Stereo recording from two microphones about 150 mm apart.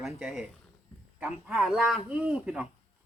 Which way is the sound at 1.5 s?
Centre (ahead or behind).